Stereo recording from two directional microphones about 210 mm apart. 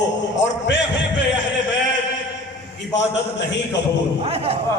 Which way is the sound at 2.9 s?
55° left (ahead or behind).